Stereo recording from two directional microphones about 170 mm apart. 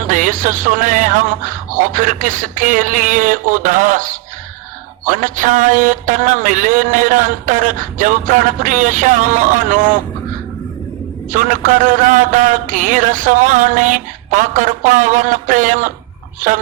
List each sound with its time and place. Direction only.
0.1 s music: 50° right (ahead or behind)
11.3 s music: 50° right (ahead or behind)